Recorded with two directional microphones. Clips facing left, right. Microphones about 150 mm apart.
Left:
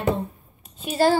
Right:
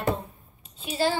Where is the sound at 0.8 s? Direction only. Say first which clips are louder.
Left 6 dB; 45° left (ahead or behind).